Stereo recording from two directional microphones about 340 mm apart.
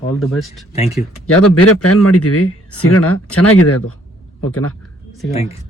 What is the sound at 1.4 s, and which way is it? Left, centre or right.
A man's voice, left.